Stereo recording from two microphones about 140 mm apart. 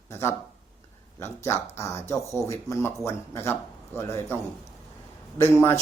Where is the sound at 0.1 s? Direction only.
20° left (ahead or behind).